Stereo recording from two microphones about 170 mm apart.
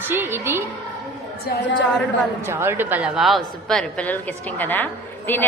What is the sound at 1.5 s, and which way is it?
Speech, 65° left (ahead or behind).